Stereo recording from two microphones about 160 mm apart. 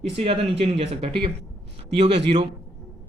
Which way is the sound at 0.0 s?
40° right (ahead or behind).